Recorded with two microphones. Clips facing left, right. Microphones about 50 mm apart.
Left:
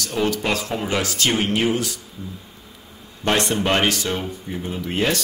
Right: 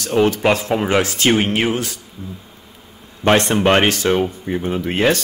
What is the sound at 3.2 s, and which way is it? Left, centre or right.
Speech, right.